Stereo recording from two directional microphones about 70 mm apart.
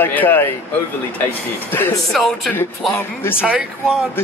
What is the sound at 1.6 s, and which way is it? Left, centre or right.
Speech, left.